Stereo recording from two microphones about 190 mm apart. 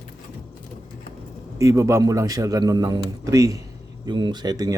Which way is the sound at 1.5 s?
15° right (ahead or behind).